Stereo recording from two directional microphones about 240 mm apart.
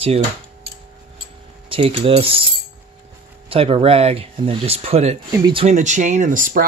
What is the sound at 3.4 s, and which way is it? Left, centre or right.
Speech, right.